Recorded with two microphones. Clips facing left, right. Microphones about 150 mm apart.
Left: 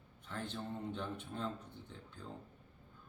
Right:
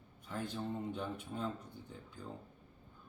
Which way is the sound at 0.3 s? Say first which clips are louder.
Right 3 dB; 10° right (ahead or behind).